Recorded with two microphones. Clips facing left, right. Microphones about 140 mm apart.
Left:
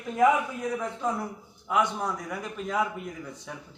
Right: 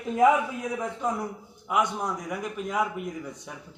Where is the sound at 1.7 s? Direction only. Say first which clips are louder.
Even; 10° right (ahead or behind).